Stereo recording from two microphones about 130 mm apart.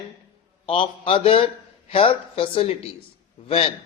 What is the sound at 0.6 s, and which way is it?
A man's voice, 45° left (ahead or behind).